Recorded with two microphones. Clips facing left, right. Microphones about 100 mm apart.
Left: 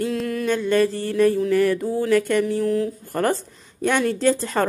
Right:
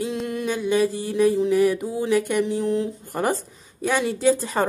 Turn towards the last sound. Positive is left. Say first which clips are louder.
# even
turn(degrees=-10)  # may be behind; listen again after turning